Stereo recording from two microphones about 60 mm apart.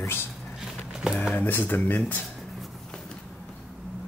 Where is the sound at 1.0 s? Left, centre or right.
Centre.